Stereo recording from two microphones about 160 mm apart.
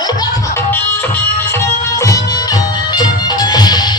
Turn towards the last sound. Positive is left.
turn(degrees=25)  # may be behind; listen again after turning